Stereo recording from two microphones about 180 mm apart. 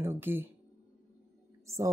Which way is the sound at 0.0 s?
10° right (ahead or behind).